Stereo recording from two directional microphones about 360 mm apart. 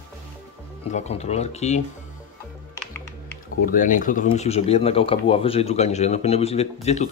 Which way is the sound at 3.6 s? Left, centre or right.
Left.